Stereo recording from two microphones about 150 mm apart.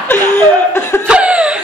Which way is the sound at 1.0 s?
10° right (ahead or behind).